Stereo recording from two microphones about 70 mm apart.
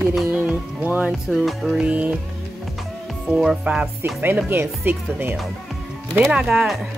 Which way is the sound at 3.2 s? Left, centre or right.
Centre.